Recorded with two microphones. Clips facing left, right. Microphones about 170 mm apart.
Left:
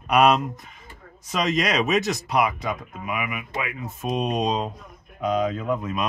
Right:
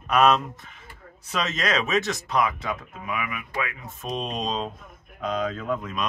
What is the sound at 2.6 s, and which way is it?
Speech, 15° left (ahead or behind).